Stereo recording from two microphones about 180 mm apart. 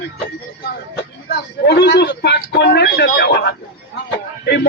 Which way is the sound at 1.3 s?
65° left (ahead or behind).